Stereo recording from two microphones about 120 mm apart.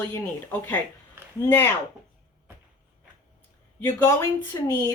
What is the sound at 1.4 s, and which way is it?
Speech, 15° left (ahead or behind).